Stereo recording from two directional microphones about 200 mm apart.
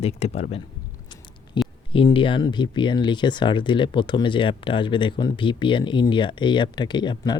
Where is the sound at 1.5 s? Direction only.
25° left (ahead or behind).